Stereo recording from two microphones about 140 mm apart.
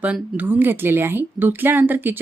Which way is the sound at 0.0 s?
10° right (ahead or behind).